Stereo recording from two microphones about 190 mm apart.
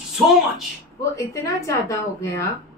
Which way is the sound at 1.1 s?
15° left (ahead or behind).